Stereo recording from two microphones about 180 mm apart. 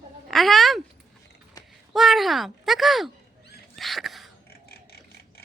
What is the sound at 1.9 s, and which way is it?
Speech, centre (ahead or behind).